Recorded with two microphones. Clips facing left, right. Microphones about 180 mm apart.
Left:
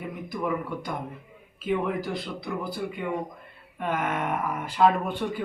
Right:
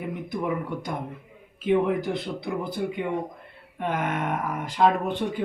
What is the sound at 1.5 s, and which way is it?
Speech, 20° right (ahead or behind).